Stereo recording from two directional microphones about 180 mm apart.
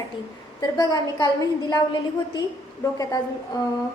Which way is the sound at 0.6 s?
20° left (ahead or behind).